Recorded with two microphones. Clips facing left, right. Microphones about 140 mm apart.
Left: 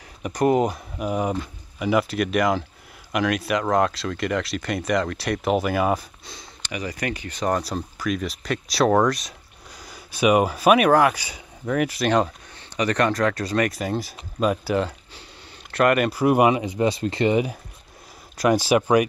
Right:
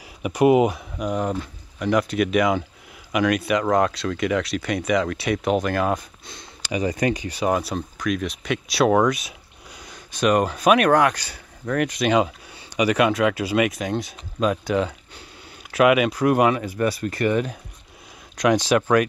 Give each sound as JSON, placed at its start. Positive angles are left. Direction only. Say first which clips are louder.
{"t": 0.2, "sound": "speech", "louder": "right 3 dB", "side_deg": -5}
{"t": 6.7, "sound": "speech", "louder": "right 6 dB", "side_deg": -25}
{"t": 7.2, "sound": "speech", "louder": "right 2 dB", "side_deg": -10}
{"t": 18.4, "sound": "speech", "louder": "even", "side_deg": 5}